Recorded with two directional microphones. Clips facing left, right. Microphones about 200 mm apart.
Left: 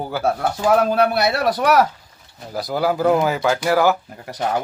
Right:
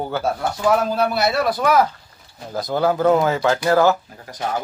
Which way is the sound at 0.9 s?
60° left (ahead or behind).